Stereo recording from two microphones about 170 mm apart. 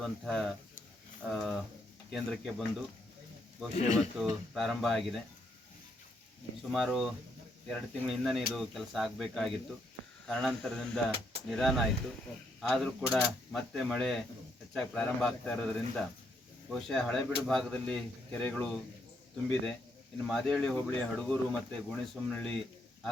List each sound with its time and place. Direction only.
0.0 s speech: centre (ahead or behind)
3.8 s speech: 40° left (ahead or behind)
4.2 s speech: centre (ahead or behind)
6.7 s speech: centre (ahead or behind)
20.2 s speech: centre (ahead or behind)